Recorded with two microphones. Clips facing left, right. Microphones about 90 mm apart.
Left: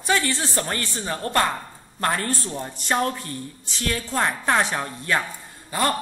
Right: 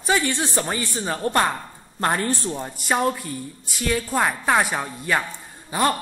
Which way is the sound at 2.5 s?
10° right (ahead or behind).